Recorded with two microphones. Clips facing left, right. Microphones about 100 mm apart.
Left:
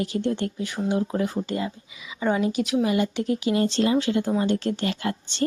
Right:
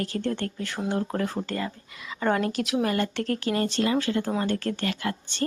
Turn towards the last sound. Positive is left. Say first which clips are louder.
# left 2 dB
turn(degrees=25)  # may be behind; listen again after turning